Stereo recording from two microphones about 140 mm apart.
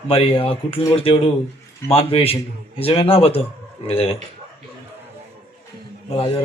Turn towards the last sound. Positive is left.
turn(degrees=40)  # may be behind; listen again after turning